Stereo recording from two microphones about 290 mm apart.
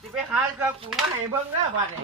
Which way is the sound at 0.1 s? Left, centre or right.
Centre.